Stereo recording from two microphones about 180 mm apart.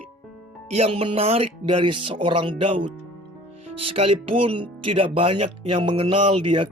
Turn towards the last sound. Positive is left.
turn(degrees=-30)  # may be behind; listen again after turning